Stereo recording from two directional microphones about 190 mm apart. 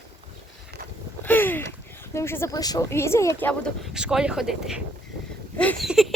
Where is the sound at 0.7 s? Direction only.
60° right (ahead or behind).